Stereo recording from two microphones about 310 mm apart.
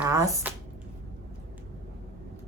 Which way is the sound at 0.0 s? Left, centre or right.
Centre.